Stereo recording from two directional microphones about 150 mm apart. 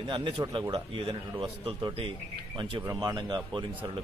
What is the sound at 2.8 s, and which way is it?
Speech, 25° right (ahead or behind).